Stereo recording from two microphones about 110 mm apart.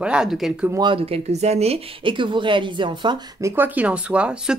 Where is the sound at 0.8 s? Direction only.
55° right (ahead or behind).